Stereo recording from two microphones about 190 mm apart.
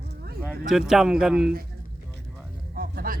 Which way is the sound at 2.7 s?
50° right (ahead or behind).